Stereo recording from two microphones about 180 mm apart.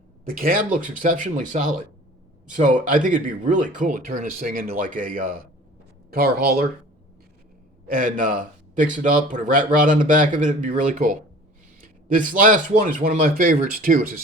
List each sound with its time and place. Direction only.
0.3 s speech: 55° right (ahead or behind)
6.1 s speech: 60° right (ahead or behind)
7.9 s speech: 50° right (ahead or behind)